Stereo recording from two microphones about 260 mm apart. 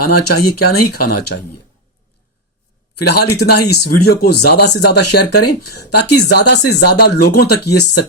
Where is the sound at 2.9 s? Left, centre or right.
Left.